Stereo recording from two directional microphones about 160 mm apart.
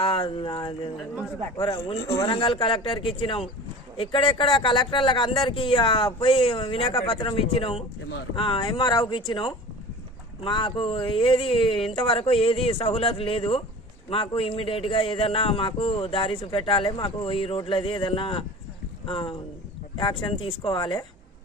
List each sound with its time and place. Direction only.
0.0 s a man's voice: 35° left (ahead or behind)